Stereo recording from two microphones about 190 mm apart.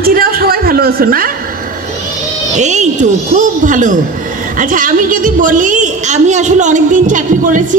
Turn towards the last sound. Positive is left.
turn(degrees=-40)  # may be behind; listen again after turning